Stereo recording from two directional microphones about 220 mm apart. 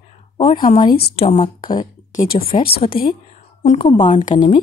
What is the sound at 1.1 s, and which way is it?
Speech, 25° left (ahead or behind).